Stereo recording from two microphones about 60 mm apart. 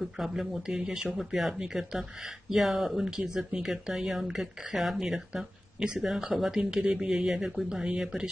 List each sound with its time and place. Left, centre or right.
0.0 s speech: centre